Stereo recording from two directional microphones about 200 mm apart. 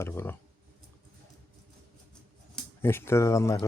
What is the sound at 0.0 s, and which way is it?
Speech, 10° left (ahead or behind).